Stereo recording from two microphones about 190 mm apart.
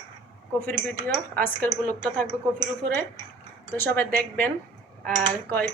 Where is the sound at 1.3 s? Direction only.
10° left (ahead or behind).